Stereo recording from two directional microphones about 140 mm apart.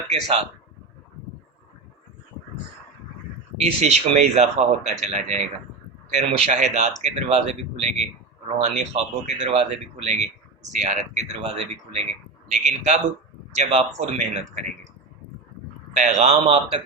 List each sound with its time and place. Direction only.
0.1 s speech: 45° right (ahead or behind)
3.6 s speech: 50° right (ahead or behind)
16.0 s speech: 55° right (ahead or behind)